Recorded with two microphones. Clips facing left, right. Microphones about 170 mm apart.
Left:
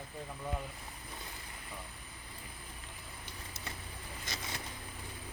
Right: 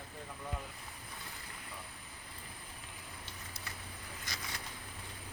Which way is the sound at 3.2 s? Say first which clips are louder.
Left 5 dB; 25° left (ahead or behind).